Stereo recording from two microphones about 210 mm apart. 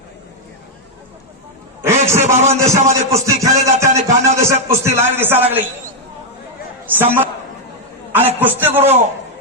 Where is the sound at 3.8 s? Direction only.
35° right (ahead or behind).